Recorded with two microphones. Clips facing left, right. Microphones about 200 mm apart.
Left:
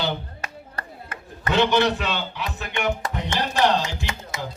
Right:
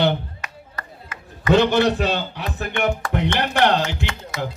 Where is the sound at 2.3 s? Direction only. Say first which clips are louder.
Right 3 dB; 55° right (ahead or behind).